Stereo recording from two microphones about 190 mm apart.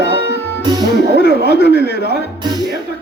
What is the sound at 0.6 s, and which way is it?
Speech, 20° right (ahead or behind).